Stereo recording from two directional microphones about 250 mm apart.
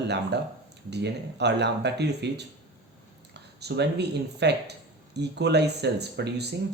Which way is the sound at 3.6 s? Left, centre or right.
Right.